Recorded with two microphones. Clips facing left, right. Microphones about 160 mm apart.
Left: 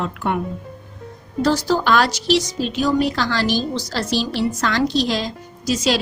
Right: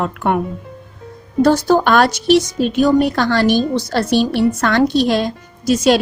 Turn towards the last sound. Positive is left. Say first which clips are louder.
# right 7 dB
turn(degrees=-55)  # may be behind; listen again after turning